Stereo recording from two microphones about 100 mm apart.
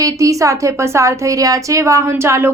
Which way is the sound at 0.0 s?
35° right (ahead or behind).